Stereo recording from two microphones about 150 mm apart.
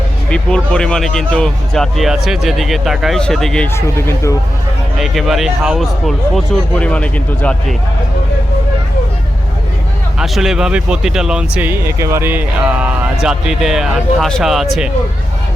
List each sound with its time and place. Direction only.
0.3 s speech: 5° left (ahead or behind)
3.7 s speech: 15° left (ahead or behind)
4.9 s speech: centre (ahead or behind)
10.2 s speech: 5° right (ahead or behind)